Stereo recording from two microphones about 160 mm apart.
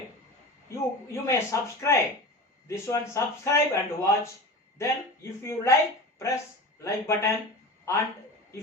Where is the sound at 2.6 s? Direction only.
20° left (ahead or behind).